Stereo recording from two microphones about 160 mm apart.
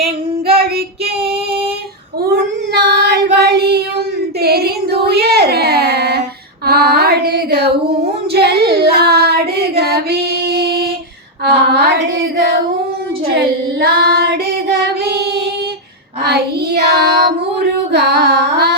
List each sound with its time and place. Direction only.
0.4 s child singing: 70° right (ahead or behind)
2.2 s child singing: 85° right
4.4 s a sound: 80° right
6.7 s female singing: 85° right
8.3 s child singing: 90° right
15.0 s child singing: 90° right